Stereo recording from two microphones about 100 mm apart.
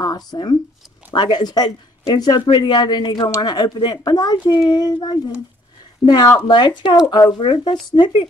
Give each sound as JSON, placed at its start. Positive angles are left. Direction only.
{"t": 0.0, "sound": "speech", "side_deg": 45}